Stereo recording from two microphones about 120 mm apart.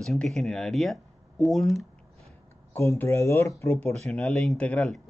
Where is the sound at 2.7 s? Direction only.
20° left (ahead or behind).